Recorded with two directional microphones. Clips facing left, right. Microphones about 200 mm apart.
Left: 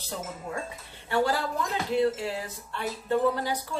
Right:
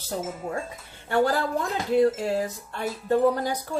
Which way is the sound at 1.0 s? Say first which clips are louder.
Right 3 dB; 50° right (ahead or behind).